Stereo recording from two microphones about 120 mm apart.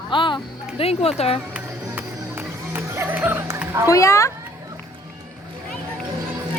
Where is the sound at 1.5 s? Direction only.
15° right (ahead or behind).